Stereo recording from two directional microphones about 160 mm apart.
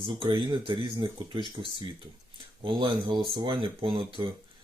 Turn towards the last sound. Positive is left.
turn(degrees=-35)  # may be behind; listen again after turning